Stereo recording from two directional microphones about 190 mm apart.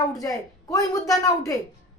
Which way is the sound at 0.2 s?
15° left (ahead or behind).